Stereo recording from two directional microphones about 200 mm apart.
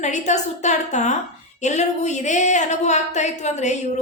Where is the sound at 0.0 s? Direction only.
35° left (ahead or behind).